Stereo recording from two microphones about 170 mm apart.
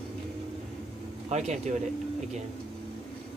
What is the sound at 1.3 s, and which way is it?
Speech, 40° right (ahead or behind).